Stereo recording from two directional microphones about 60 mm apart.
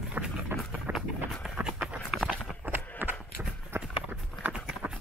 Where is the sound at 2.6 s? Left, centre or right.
Right.